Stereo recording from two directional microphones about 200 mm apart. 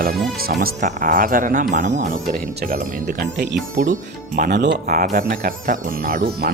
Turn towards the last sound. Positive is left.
turn(degrees=-45)  # may be behind; listen again after turning